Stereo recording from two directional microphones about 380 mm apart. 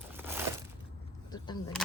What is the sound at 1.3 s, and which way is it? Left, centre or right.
Speech, centre.